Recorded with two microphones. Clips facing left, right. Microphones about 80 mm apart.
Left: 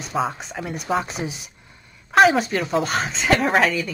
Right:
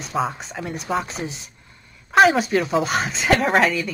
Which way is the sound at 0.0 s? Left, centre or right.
Centre.